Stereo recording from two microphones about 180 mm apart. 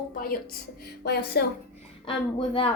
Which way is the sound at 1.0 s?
60° left (ahead or behind).